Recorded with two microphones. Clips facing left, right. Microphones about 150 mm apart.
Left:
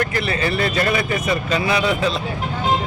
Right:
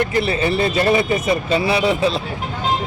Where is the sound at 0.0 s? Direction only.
25° right (ahead or behind).